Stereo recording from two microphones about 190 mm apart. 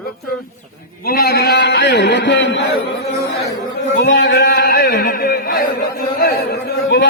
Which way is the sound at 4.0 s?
65° left (ahead or behind).